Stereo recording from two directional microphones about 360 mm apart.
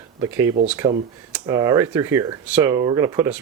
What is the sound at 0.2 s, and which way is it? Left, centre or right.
Speech, centre.